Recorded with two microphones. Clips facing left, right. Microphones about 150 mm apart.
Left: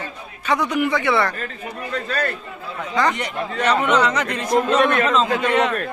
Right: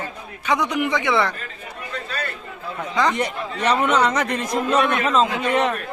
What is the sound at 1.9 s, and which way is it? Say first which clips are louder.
Speech: left 6 dB; 45° left (ahead or behind).